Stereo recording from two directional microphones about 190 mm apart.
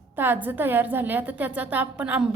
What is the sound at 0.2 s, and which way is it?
A woman's voice, 10° right (ahead or behind).